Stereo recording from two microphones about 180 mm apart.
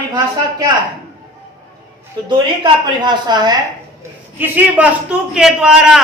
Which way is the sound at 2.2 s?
25° right (ahead or behind).